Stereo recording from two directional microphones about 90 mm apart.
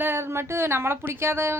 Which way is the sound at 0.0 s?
25° right (ahead or behind).